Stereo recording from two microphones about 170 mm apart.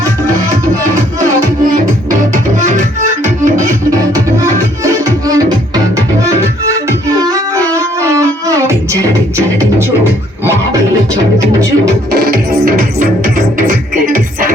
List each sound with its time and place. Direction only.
2.6 s music: 45° right (ahead or behind)
4.1 s music: 20° right (ahead or behind)
7.2 s music: 20° right (ahead or behind)
12.2 s music: 60° right (ahead or behind)